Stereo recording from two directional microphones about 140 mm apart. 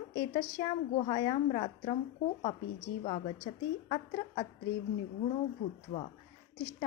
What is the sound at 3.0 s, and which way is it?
A woman's voice, 45° left (ahead or behind).